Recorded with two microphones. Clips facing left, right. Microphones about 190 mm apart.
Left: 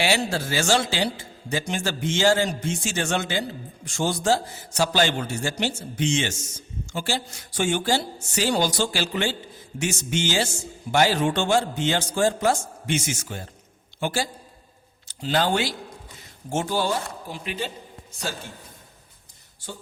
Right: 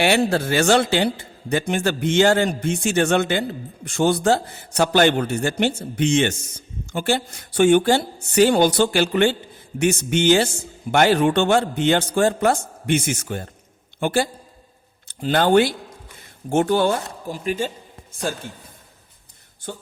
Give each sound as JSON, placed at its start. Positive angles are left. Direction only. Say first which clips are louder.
{"t": 0.0, "sound": "a man's voice", "louder": "right 6 dB", "side_deg": -60}
{"t": 19.7, "sound": "a man's voice", "louder": "right 5 dB", "side_deg": -55}